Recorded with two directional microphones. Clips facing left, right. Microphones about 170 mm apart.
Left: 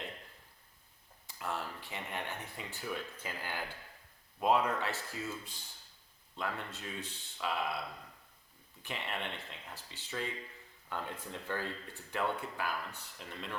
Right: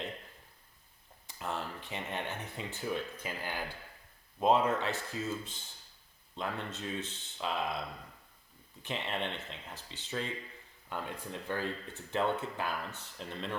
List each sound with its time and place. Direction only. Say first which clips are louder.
1.3 s speech: right 1 dB; 20° right (ahead or behind)
8.8 s speech: right 4 dB; 20° right (ahead or behind)